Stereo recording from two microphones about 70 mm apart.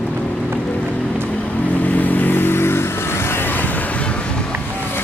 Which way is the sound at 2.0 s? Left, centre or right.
Left.